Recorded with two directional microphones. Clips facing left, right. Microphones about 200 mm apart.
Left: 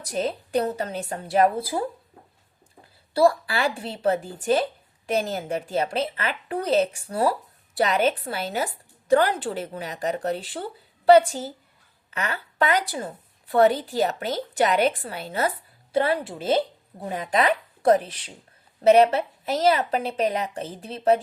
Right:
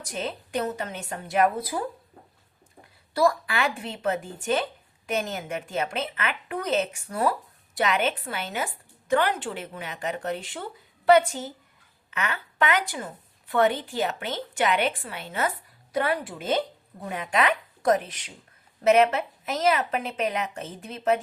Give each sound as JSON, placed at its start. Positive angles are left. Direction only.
{"t": 0.0, "sound": "a woman's voice", "side_deg": 35}
{"t": 2.8, "sound": "a woman's voice", "side_deg": 30}